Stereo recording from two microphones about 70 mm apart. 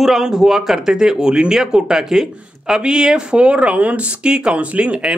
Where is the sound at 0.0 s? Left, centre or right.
Centre.